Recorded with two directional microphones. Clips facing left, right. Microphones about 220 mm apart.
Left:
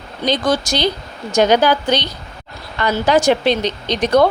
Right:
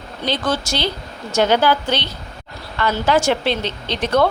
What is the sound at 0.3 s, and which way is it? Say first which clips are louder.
A woman's voice: left 4 dB; 15° left (ahead or behind).